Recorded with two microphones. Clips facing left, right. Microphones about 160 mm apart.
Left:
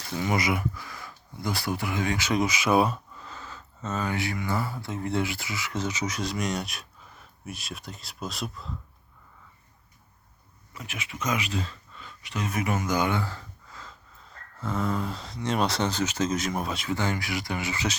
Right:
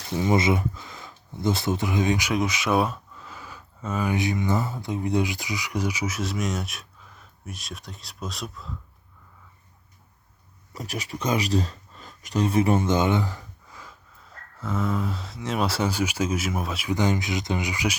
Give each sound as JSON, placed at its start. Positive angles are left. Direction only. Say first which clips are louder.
{"t": 0.2, "sound": "speech", "louder": "right 5 dB", "side_deg": -25}
{"t": 2.3, "sound": "speech", "louder": "even", "side_deg": 0}
{"t": 10.8, "sound": "speech", "louder": "right 5 dB", "side_deg": -35}
{"t": 14.6, "sound": "speech", "louder": "right 1 dB", "side_deg": 0}
{"t": 16.9, "sound": "speech", "louder": "right 5 dB", "side_deg": -15}